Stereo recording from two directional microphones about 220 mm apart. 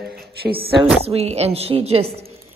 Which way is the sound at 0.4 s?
45° right (ahead or behind).